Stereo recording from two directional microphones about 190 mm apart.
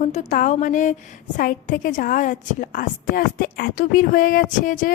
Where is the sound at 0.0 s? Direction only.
40° left (ahead or behind).